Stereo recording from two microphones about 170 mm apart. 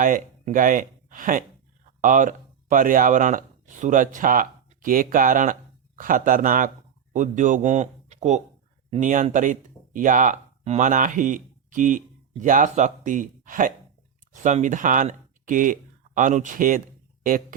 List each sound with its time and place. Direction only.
0.0 s speech: 50° right (ahead or behind)